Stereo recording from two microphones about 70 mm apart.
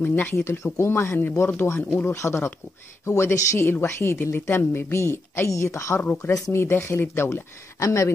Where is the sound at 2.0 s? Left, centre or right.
Left.